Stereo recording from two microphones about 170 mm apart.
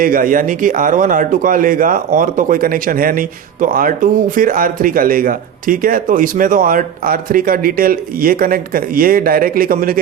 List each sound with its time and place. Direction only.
0.0 s a man's voice: 55° right (ahead or behind)